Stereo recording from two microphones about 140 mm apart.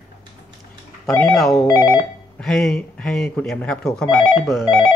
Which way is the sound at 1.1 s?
5° left (ahead or behind).